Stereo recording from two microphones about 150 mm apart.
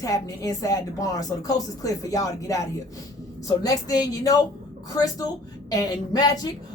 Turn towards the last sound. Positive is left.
turn(degrees=25)  # may be behind; listen again after turning